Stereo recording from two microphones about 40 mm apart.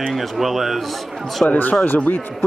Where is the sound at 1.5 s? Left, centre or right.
Left.